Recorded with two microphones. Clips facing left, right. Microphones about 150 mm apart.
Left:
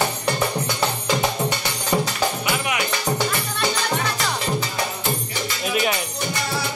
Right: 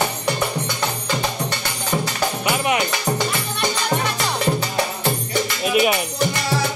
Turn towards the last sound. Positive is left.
turn(degrees=-15)  # may be behind; listen again after turning